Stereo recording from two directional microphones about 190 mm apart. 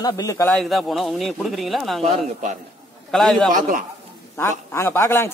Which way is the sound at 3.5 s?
45° right (ahead or behind).